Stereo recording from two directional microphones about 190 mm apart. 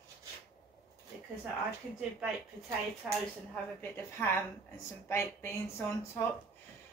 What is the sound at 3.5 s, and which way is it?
A woman's voice, 10° left (ahead or behind).